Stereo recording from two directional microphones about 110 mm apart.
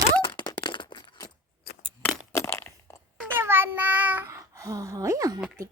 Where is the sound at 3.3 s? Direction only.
20° right (ahead or behind).